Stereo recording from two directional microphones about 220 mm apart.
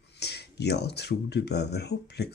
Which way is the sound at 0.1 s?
50° left (ahead or behind).